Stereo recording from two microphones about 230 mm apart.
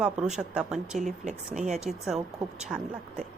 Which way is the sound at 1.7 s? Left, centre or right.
Right.